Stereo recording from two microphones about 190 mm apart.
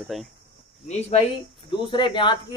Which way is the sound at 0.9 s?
35° left (ahead or behind).